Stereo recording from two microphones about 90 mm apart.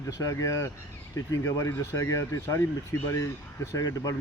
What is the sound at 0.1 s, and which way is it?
Speech, 40° left (ahead or behind).